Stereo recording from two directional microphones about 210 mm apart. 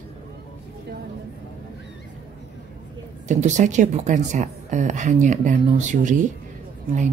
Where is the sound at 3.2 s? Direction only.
35° right (ahead or behind).